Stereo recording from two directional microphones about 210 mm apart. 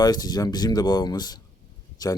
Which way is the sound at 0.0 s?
20° left (ahead or behind).